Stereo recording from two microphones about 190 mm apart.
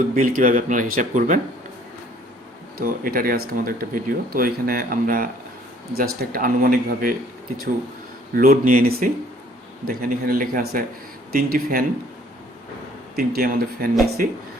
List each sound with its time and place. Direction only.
0.1 s speech: 45° right (ahead or behind)
2.7 s speech: 50° right (ahead or behind)
8.4 s speech: 45° right (ahead or behind)
13.1 s speech: 55° right (ahead or behind)